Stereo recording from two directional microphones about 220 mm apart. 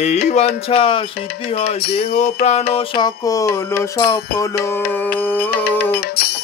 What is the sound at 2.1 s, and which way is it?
Speech, 35° left (ahead or behind).